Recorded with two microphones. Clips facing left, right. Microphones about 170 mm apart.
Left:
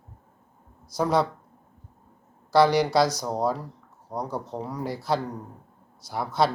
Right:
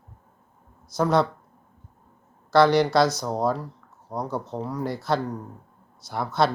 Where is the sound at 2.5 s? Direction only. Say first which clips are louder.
Right 1 dB; 10° left (ahead or behind).